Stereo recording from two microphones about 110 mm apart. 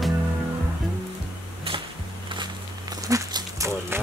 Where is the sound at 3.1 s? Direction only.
30° right (ahead or behind).